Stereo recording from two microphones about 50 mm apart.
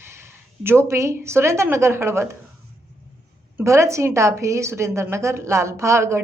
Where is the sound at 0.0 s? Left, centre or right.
Right.